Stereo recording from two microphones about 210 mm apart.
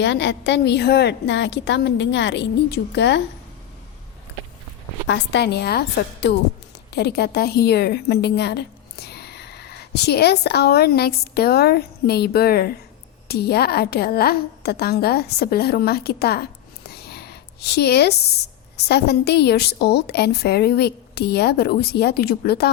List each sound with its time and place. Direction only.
0.0 s a woman's voice: 55° left (ahead or behind)
5.0 s a woman's voice: 60° left (ahead or behind)
6.9 s a woman's voice: 50° left (ahead or behind)